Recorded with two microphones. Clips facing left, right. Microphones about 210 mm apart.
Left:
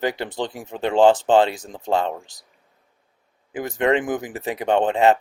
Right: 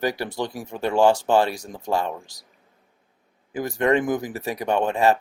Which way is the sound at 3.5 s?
20° left (ahead or behind).